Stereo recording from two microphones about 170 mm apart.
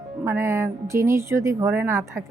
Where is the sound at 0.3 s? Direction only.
15° right (ahead or behind).